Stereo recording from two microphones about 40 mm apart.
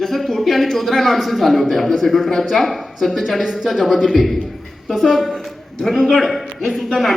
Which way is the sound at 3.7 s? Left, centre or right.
Centre.